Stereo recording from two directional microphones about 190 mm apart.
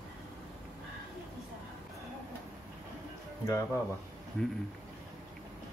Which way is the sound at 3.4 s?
15° left (ahead or behind).